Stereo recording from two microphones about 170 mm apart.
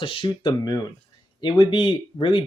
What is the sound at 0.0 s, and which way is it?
Speech, 30° left (ahead or behind).